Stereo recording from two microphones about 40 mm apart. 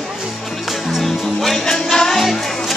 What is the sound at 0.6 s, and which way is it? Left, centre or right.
Music, centre.